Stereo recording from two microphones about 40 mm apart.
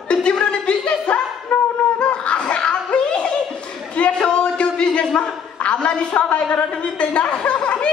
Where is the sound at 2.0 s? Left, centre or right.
Left.